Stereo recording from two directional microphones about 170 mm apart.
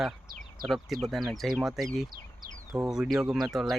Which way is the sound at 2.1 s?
60° right (ahead or behind).